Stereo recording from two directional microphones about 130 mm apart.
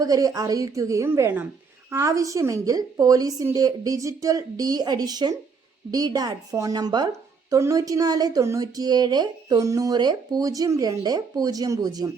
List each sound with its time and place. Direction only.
0.0 s a woman's voice: 30° right (ahead or behind)